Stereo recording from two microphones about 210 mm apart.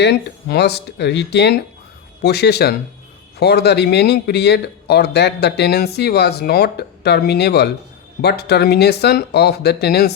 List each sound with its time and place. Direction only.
0.0 s speech: 50° left (ahead or behind)